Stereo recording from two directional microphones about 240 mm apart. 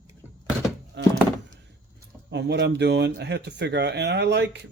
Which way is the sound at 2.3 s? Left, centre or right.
Right.